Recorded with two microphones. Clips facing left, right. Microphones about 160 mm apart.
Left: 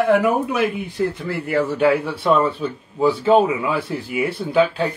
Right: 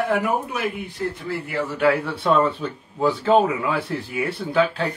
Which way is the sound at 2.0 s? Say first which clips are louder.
Left 2 dB; 5° left (ahead or behind).